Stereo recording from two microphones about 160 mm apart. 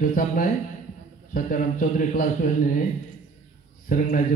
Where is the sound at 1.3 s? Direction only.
60° left (ahead or behind).